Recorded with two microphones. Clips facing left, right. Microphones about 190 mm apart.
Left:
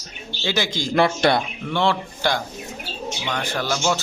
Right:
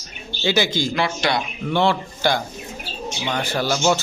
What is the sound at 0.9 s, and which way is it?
Speech, 50° left (ahead or behind).